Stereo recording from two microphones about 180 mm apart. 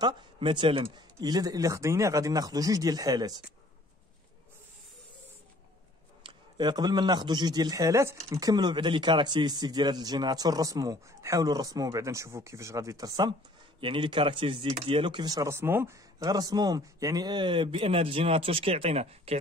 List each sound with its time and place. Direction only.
0.0 s a man's voice: 25° right (ahead or behind)
6.2 s a man's voice: 25° right (ahead or behind)